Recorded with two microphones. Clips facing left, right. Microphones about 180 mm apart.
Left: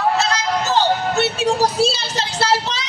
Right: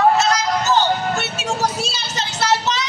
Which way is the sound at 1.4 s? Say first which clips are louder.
Left 5 dB; 35° left (ahead or behind).